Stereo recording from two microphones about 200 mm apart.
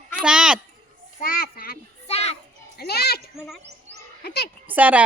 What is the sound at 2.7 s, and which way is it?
Speech, 50° left (ahead or behind).